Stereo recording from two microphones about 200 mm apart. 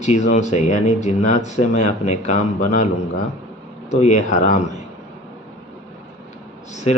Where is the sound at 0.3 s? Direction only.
35° left (ahead or behind).